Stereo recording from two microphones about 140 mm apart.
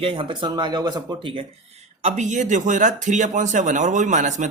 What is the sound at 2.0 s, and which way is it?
Speech, 60° right (ahead or behind).